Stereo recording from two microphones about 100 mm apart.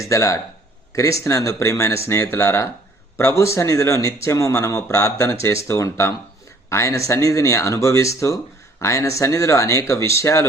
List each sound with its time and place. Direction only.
0.0 s speech: 30° left (ahead or behind)